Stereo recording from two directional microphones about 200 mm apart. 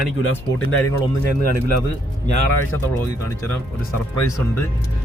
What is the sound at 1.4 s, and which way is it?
Speech, 50° right (ahead or behind).